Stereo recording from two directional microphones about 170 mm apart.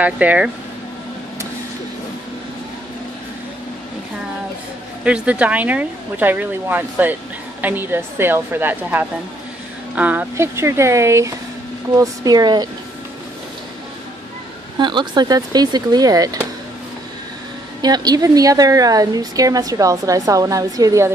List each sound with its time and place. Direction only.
0.0 s speech: 10° right (ahead or behind)
5.0 s a woman's voice: 5° right (ahead or behind); by 12.6 s 25° right (ahead or behind)
14.8 s a woman's voice: 25° right (ahead or behind)
17.8 s a woman's voice: 25° right (ahead or behind)